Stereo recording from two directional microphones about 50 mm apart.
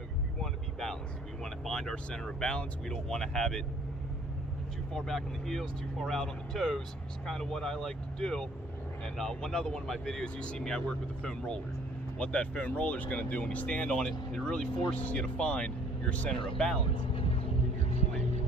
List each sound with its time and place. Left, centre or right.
0.4 s vehicle: centre
1.4 s speech: centre
4.9 s speech: centre